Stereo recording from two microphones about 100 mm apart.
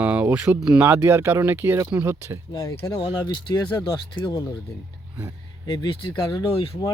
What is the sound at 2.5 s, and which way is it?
Speech, 35° left (ahead or behind).